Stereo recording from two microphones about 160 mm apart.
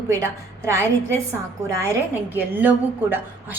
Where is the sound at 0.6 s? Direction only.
15° right (ahead or behind).